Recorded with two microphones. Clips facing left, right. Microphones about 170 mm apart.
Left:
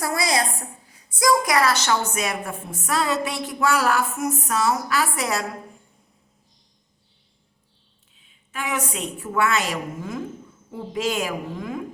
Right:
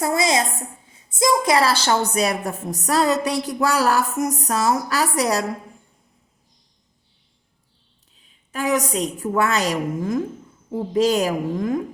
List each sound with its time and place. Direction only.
0.0 s a sound: 20° right (ahead or behind)
0.9 s a woman's voice: 25° right (ahead or behind)
8.2 s a woman's voice: 40° right (ahead or behind)